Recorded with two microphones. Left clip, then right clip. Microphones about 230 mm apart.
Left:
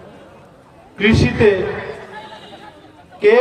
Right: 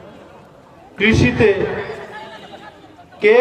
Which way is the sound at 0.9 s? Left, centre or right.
Right.